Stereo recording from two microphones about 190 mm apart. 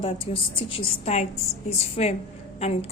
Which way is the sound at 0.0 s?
30° left (ahead or behind).